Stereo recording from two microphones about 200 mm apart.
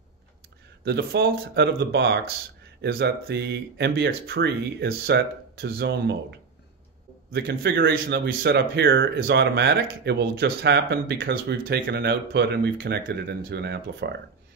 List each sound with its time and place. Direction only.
0.8 s speech: 50° right (ahead or behind)
7.3 s speech: 50° right (ahead or behind)